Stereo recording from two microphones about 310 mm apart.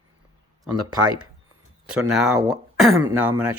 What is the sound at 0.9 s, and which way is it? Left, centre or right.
Speech, centre.